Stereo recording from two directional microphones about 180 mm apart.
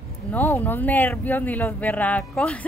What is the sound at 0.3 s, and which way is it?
A woman's voice, 10° left (ahead or behind).